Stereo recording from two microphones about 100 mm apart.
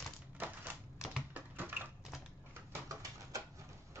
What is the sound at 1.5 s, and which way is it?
Typewriter, 20° right (ahead or behind).